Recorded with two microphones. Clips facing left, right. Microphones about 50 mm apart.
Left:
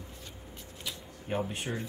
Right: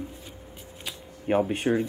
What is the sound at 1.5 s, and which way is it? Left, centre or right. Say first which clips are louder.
Speech: right 11 dB; right.